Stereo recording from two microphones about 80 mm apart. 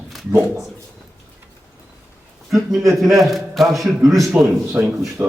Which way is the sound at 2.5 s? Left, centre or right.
Centre.